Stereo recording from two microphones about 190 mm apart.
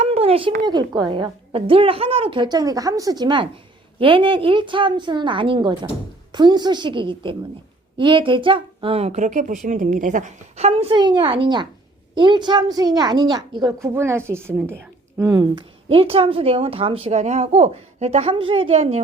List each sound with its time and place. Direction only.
0.0 s a sound: 30° right (ahead or behind)
0.6 s a woman's voice: 20° right (ahead or behind)
15.9 s a woman's voice: 30° right (ahead or behind)